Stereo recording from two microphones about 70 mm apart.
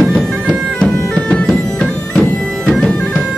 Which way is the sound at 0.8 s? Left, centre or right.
Centre.